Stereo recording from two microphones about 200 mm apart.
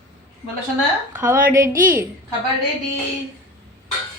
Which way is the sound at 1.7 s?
45° right (ahead or behind).